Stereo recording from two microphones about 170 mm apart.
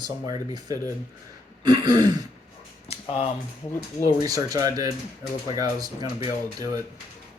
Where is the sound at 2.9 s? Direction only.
35° left (ahead or behind).